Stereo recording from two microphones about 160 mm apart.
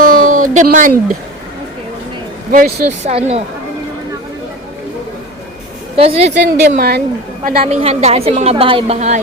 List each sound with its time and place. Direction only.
0.0 s a sound: 60° right (ahead or behind)
2.5 s speech: 55° right (ahead or behind)
3.1 s a woman's voice: 40° right (ahead or behind)
6.0 s a woman's voice: 40° right (ahead or behind)
6.3 s a woman's voice: 85° right
7.7 s a woman's voice: 40° right (ahead or behind)